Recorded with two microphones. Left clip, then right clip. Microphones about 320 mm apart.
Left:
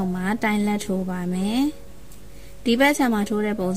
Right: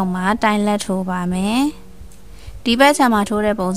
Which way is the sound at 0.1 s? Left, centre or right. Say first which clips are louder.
Right 8 dB; right.